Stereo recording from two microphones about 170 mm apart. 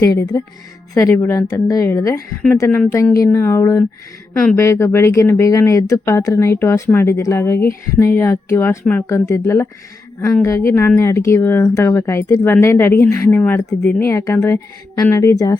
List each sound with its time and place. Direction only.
0.0 s speech: 20° left (ahead or behind)